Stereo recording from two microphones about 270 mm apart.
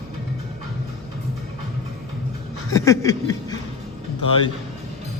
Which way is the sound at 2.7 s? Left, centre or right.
Centre.